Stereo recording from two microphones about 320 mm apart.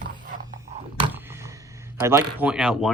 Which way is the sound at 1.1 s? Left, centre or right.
Centre.